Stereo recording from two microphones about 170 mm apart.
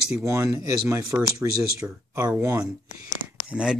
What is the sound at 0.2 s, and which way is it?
Speech, 15° right (ahead or behind).